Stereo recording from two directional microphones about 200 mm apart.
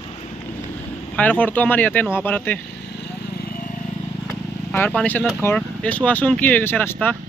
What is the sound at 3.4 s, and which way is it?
Vehicle, 45° left (ahead or behind).